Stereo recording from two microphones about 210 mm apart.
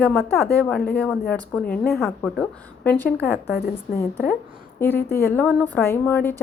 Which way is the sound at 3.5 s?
45° left (ahead or behind).